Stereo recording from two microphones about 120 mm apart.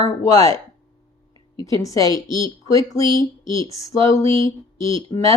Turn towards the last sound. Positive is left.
turn(degrees=25)  # may be behind; listen again after turning